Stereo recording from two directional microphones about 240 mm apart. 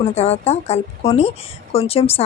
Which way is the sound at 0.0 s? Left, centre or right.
Left.